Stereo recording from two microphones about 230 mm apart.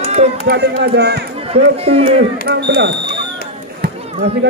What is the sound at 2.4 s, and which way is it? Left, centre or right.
Speech, right.